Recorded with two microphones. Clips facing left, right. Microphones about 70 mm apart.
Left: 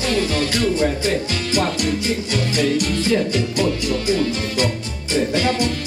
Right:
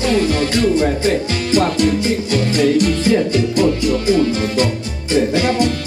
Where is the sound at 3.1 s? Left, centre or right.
Right.